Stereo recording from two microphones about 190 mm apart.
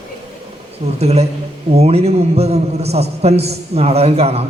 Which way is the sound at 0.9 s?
35° right (ahead or behind).